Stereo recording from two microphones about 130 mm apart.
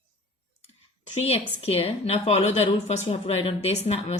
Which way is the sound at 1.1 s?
55° left (ahead or behind).